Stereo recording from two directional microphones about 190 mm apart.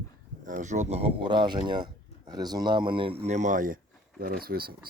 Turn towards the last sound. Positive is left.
turn(degrees=-55)  # may be behind; listen again after turning